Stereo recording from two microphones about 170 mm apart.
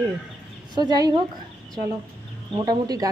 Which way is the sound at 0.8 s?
25° right (ahead or behind).